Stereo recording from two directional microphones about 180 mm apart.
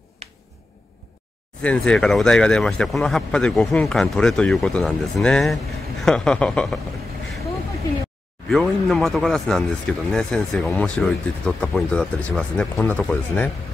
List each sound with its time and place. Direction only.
0.2 s a sound: 35° right (ahead or behind)
1.6 s speech: 5° left (ahead or behind)
8.5 s speech: centre (ahead or behind)